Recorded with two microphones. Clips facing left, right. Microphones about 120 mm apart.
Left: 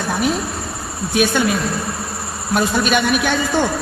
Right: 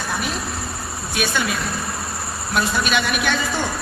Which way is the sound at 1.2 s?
55° left (ahead or behind).